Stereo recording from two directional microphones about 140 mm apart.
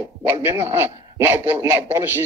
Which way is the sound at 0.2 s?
15° right (ahead or behind).